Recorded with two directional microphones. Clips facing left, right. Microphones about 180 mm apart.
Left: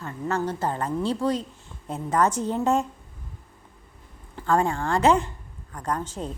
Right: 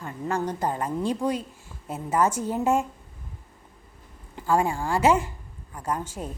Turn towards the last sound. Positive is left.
turn(degrees=-10)  # may be behind; listen again after turning